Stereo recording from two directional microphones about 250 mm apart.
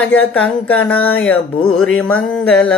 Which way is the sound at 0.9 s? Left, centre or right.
Left.